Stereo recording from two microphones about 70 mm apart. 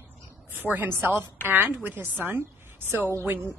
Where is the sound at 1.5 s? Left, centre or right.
Right.